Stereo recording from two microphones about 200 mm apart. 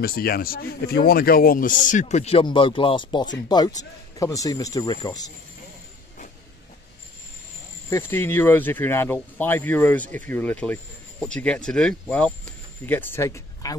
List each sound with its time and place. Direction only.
0.0 s speech: 50° left (ahead or behind); by 5.3 s 20° left (ahead or behind)
7.9 s speech: 10° left (ahead or behind)